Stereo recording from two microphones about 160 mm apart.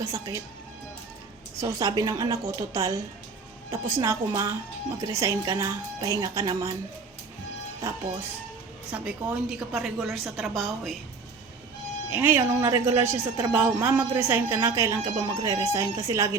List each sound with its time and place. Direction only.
0.0 s speech: 20° right (ahead or behind)
1.6 s speech: 20° right (ahead or behind)
7.8 s speech: 20° right (ahead or behind)
8.9 s a woman's voice: 5° right (ahead or behind)
12.1 s speech: 15° right (ahead or behind)